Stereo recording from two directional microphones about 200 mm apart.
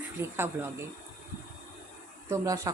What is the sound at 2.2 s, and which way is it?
Speech, 15° right (ahead or behind).